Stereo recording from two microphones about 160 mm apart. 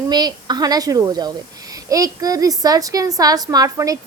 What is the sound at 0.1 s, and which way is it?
A woman's voice, 25° right (ahead or behind).